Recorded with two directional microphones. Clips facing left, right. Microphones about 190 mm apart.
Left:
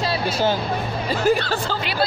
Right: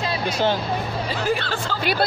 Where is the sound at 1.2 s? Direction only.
40° left (ahead or behind).